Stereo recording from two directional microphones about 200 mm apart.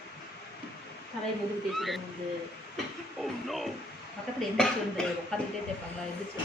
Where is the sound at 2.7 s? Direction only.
Centre (ahead or behind).